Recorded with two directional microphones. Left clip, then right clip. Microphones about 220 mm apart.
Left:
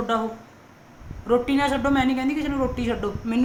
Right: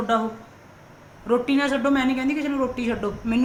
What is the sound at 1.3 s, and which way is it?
Speech, 5° left (ahead or behind).